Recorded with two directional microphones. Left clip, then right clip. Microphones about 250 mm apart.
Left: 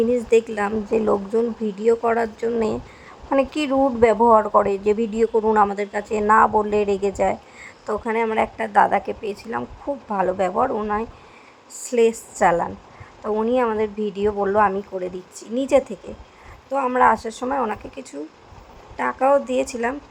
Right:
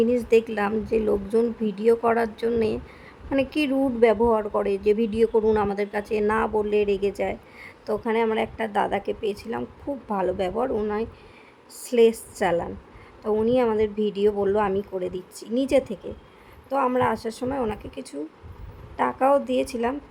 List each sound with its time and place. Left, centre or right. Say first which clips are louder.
0.0 s a woman's voice: left 2 dB; centre